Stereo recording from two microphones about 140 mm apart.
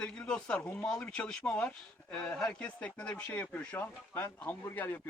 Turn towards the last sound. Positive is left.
turn(degrees=15)  # may be behind; listen again after turning